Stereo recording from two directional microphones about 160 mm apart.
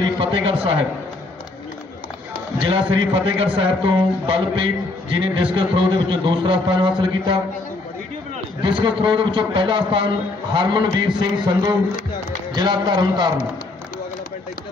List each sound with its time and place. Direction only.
0.2 s a man's voice: 30° right (ahead or behind)
2.6 s a man's voice: 35° right (ahead or behind)
8.6 s a man's voice: 30° right (ahead or behind)